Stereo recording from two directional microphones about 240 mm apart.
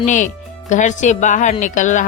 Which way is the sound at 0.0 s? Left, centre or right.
Left.